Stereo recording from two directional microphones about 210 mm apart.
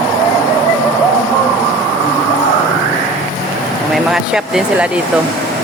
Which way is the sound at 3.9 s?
Centre (ahead or behind).